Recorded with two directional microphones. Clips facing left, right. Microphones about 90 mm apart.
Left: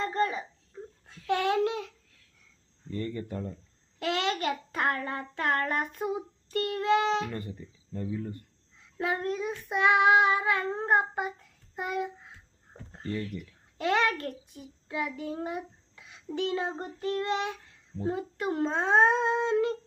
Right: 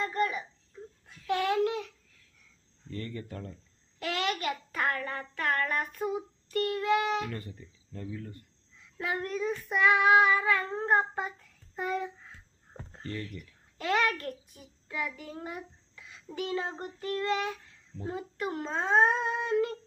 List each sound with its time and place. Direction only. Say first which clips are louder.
0.0 s a sound: left 2 dB; 30° left (ahead or behind)
1.3 s child singing: left 1 dB; 25° left (ahead or behind)
2.9 s child singing: left 5 dB; 20° left (ahead or behind)
11.8 s a child's voice: even; 15° left (ahead or behind)
16.3 s child singing: left 3 dB; 25° left (ahead or behind)